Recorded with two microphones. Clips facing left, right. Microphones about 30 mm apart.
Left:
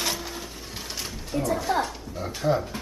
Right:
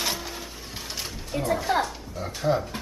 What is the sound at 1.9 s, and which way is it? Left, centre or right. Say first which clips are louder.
Speech: left 1 dB; centre.